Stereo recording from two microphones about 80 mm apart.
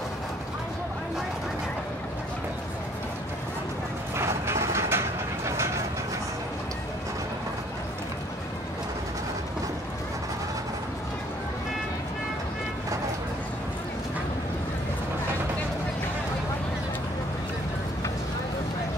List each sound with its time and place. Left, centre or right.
4.2 s vehicle: right